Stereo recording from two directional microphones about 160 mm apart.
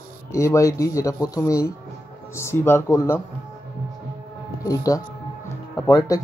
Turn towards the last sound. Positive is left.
turn(degrees=25)  # may be behind; listen again after turning